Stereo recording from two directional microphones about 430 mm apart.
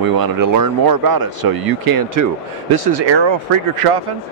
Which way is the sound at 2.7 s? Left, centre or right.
Right.